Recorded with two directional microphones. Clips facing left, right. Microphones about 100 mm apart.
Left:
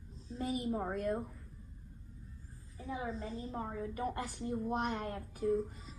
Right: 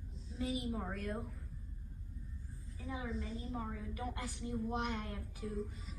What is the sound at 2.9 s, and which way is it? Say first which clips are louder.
A woman's voice: left 3 dB; 40° left (ahead or behind).